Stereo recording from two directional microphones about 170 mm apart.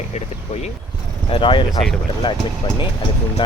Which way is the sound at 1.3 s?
30° left (ahead or behind).